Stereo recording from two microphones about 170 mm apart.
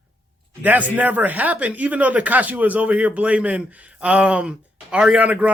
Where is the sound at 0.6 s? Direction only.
10° right (ahead or behind).